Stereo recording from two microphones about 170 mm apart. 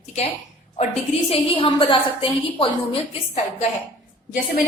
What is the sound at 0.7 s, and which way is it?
A woman's voice, 35° left (ahead or behind).